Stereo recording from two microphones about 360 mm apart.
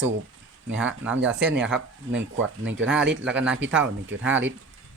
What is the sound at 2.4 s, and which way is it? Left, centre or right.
Speech, right.